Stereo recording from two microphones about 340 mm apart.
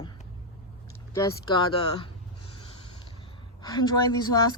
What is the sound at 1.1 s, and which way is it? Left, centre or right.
Speech, centre.